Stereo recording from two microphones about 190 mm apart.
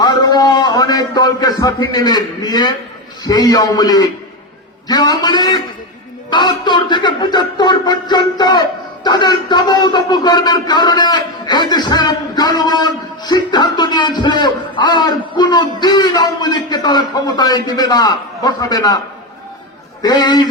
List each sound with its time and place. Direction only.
0.0 s a sound: 20° left (ahead or behind)
3.2 s a man's voice: 20° left (ahead or behind)
20.0 s a man's voice: 20° left (ahead or behind)